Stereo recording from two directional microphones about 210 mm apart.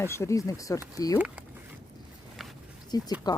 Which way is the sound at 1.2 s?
5° right (ahead or behind).